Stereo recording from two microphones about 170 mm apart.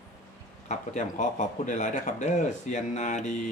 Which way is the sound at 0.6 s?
45° left (ahead or behind).